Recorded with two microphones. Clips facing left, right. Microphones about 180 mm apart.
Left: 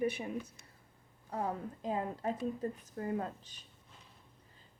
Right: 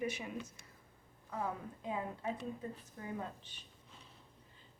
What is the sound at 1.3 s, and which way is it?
A woman's voice, 35° left (ahead or behind).